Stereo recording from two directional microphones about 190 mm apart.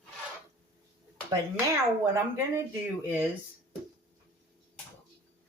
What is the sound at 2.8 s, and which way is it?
Speech, 10° right (ahead or behind).